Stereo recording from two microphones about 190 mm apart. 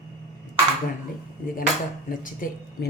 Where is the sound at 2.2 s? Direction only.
45° left (ahead or behind).